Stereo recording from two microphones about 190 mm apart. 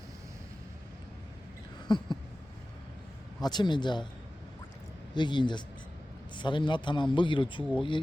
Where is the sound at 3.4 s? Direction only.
20° left (ahead or behind).